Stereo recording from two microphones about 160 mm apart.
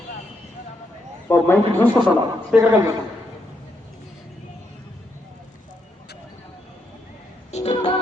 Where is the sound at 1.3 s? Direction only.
15° left (ahead or behind).